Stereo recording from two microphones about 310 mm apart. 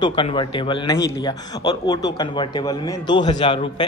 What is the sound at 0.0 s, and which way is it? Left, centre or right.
A man's voice, centre.